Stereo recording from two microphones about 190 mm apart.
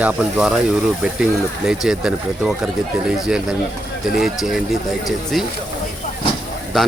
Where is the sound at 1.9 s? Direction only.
5° right (ahead or behind).